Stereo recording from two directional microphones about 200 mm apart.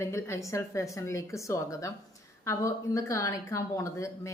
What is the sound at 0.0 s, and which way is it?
A woman's voice, 15° left (ahead or behind).